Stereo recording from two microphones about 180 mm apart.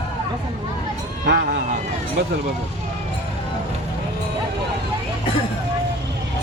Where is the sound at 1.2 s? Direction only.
60° right (ahead or behind).